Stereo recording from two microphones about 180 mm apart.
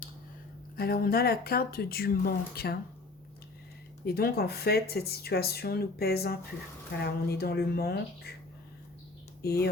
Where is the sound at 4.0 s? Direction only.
60° left (ahead or behind).